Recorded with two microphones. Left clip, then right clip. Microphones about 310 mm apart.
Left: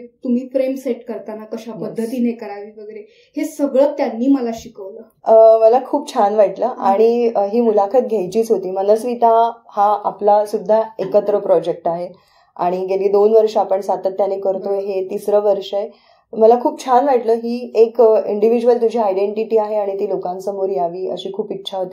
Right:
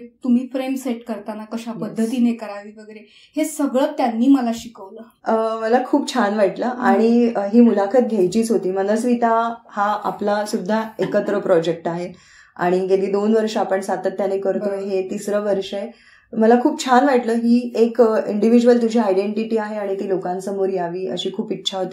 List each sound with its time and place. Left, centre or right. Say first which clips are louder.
0.3 s speech: left 4 dB; right
5.2 s a woman's voice: left 12 dB; centre